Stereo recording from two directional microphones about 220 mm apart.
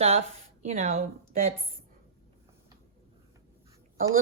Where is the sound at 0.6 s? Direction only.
35° right (ahead or behind).